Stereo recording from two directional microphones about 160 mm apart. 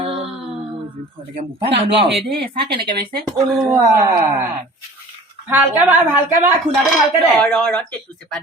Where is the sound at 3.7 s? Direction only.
25° right (ahead or behind).